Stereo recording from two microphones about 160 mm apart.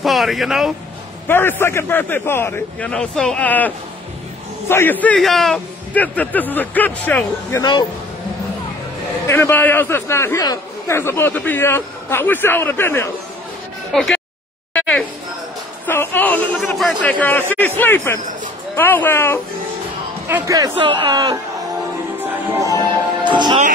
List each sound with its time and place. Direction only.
0.0 s speech: centre (ahead or behind)
1.2 s a man's voice: 15° left (ahead or behind)
9.3 s a man's voice: 15° left (ahead or behind)
14.7 s a sound: 10° left (ahead or behind)
15.9 s a man's voice: 15° left (ahead or behind)
16.5 s a man's voice: centre (ahead or behind)
20.2 s a man's voice: 15° right (ahead or behind)
23.2 s speech: 30° right (ahead or behind)